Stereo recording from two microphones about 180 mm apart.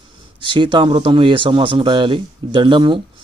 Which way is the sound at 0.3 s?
25° right (ahead or behind).